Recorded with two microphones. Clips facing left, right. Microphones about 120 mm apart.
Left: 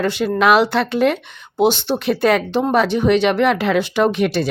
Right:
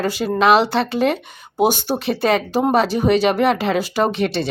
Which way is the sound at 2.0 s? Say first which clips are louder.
Left 2 dB; centre (ahead or behind).